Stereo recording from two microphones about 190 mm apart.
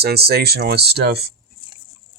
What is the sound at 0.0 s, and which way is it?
Speech, 55° right (ahead or behind).